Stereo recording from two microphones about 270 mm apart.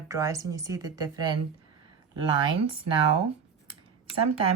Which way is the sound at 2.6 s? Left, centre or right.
Centre.